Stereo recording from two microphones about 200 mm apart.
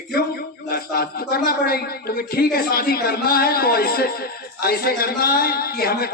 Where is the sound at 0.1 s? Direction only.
50° left (ahead or behind).